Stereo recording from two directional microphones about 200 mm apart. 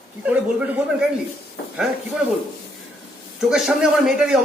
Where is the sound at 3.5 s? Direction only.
Centre (ahead or behind).